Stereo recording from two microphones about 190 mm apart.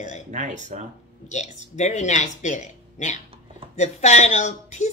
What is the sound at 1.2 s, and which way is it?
Speech, 40° left (ahead or behind).